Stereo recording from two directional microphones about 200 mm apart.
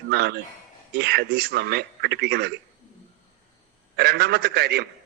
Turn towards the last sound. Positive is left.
turn(degrees=-55)  # may be behind; listen again after turning